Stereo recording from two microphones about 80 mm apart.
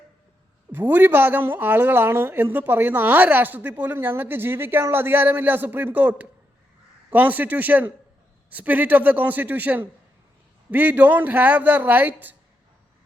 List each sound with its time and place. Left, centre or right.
0.7 s speech: right